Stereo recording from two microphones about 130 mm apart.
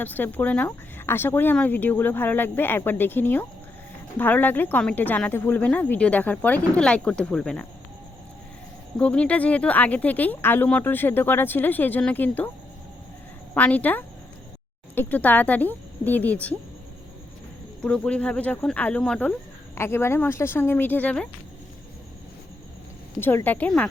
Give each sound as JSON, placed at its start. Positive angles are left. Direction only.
{"t": 0.0, "sound": "a woman's voice", "side_deg": 15}
{"t": 9.0, "sound": "a woman's voice", "side_deg": 10}
{"t": 13.5, "sound": "a woman's voice", "side_deg": 10}
{"t": 17.8, "sound": "a woman's voice", "side_deg": 5}
{"t": 19.7, "sound": "a woman's voice", "side_deg": 20}
{"t": 23.2, "sound": "a woman's voice", "side_deg": 15}